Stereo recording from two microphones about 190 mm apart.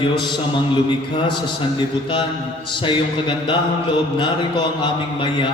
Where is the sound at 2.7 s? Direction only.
25° left (ahead or behind).